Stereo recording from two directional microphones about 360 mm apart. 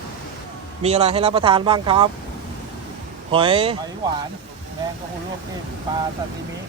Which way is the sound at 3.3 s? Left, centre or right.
Centre.